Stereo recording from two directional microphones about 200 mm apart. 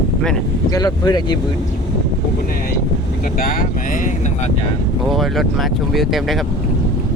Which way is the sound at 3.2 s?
45° left (ahead or behind).